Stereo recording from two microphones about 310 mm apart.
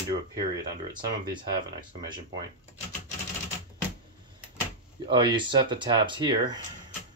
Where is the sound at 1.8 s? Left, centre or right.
Centre.